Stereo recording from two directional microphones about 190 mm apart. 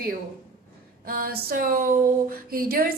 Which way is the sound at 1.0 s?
50° right (ahead or behind).